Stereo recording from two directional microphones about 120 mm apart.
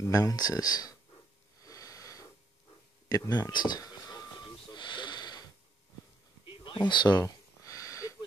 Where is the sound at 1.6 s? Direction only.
30° left (ahead or behind).